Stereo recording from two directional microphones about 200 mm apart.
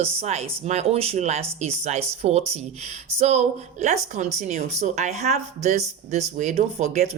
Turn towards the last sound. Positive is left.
turn(degrees=-35)  # may be behind; listen again after turning